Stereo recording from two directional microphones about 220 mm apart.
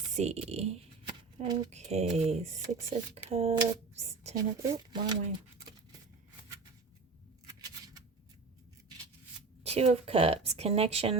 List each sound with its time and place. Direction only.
0.1 s speech: 30° right (ahead or behind)
4.4 s speech: 15° right (ahead or behind)
9.6 s speech: 30° right (ahead or behind)